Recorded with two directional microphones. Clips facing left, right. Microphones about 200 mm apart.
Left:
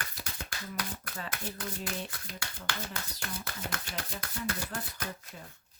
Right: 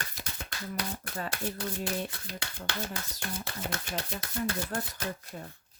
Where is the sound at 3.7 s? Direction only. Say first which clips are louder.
Right 4 dB; 30° right (ahead or behind).